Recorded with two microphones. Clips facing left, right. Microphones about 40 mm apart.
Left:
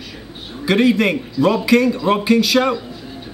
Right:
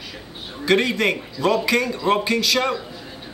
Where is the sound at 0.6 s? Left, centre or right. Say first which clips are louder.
Left 4 dB; centre.